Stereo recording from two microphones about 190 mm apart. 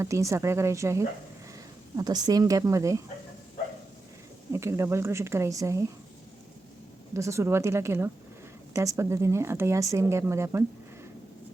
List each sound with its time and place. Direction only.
0.0 s speech: 15° right (ahead or behind)
4.5 s speech: 15° right (ahead or behind)
7.1 s speech: 15° right (ahead or behind)